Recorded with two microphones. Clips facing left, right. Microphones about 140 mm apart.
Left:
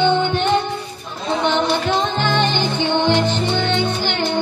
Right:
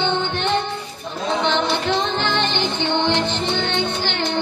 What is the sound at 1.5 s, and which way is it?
Music, 15° left (ahead or behind).